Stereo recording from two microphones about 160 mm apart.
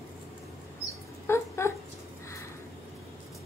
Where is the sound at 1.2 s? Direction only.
15° left (ahead or behind).